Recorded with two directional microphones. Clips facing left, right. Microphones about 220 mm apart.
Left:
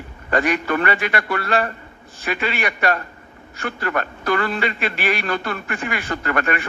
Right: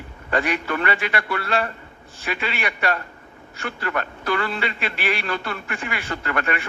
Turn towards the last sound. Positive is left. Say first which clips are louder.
# left 3 dB
turn(degrees=50)  # may be behind; listen again after turning